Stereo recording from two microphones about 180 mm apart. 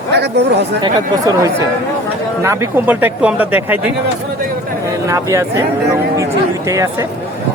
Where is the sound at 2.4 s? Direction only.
15° right (ahead or behind).